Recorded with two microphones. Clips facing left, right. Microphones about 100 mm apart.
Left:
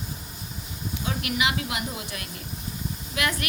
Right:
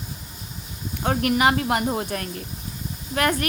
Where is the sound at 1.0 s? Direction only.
50° right (ahead or behind).